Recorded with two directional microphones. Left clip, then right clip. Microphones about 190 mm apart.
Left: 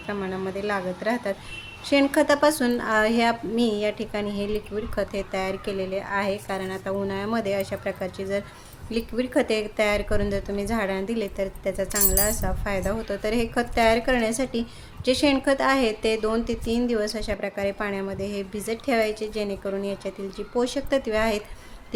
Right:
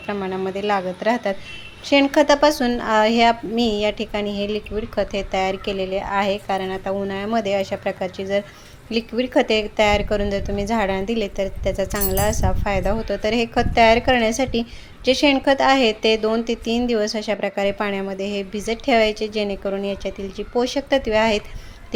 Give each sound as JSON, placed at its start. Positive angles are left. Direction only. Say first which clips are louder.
{"t": 0.1, "sound": "a woman's voice", "louder": "right 5 dB", "side_deg": -15}